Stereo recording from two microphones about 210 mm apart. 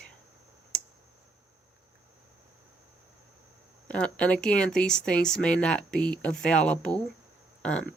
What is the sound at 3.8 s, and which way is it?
Speech, 5° left (ahead or behind).